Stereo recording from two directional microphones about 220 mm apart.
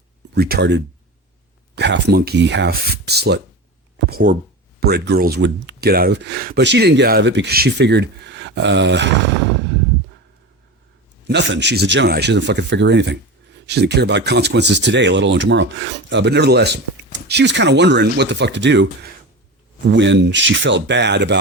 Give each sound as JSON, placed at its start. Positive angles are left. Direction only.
{"t": 0.3, "sound": "speech", "side_deg": -45}
{"t": 11.3, "sound": "speech", "side_deg": -55}
{"t": 19.9, "sound": "speech", "side_deg": -55}